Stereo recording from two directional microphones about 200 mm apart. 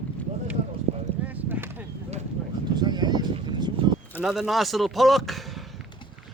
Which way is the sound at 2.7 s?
20° right (ahead or behind).